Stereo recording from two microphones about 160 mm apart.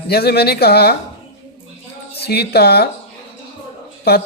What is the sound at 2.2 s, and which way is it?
Speech, 90° left.